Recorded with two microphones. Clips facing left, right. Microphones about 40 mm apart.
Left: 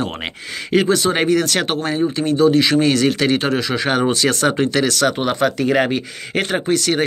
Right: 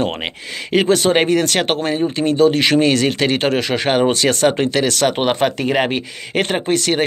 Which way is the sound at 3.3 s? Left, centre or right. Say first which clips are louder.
Even; right.